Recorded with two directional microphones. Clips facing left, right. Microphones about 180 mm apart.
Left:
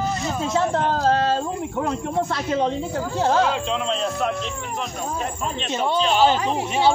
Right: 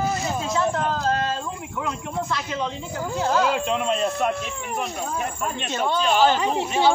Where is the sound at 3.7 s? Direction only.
10° right (ahead or behind).